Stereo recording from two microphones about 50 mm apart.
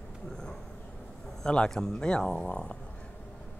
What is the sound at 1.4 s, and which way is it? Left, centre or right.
Speech, centre.